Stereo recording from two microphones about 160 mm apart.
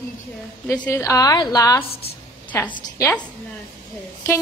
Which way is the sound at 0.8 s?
20° left (ahead or behind).